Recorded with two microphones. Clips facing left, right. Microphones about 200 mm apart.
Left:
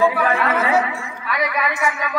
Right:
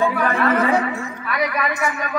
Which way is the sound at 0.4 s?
45° right (ahead or behind).